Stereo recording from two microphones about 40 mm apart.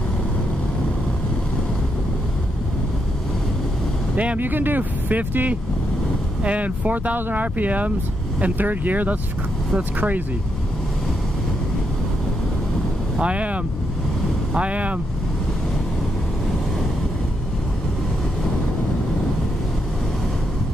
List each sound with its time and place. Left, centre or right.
4.4 s speech: right
7.2 s speech: right
13.2 s speech: right
14.6 s speech: right